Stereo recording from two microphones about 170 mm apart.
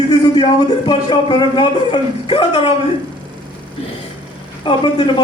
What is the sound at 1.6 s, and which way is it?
A man's voice, 30° left (ahead or behind).